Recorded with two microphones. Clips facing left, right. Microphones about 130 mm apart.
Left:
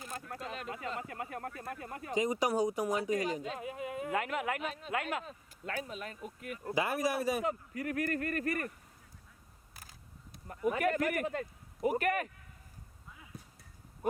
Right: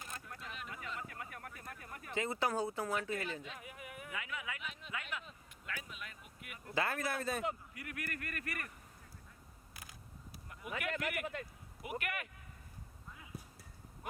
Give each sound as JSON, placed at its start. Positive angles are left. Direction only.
{"t": 0.3, "sound": "a sound", "side_deg": 40}
{"t": 0.7, "sound": "speech", "side_deg": 30}
{"t": 2.1, "sound": "speech", "side_deg": 15}
{"t": 3.4, "sound": "speech", "side_deg": 30}
{"t": 4.1, "sound": "speech", "side_deg": 60}
{"t": 4.7, "sound": "speech", "side_deg": 40}
{"t": 6.7, "sound": "speech", "side_deg": 15}
{"t": 7.4, "sound": "speech", "side_deg": 40}
{"t": 10.7, "sound": "speech", "side_deg": 45}
{"t": 13.3, "sound": "a sound", "side_deg": -5}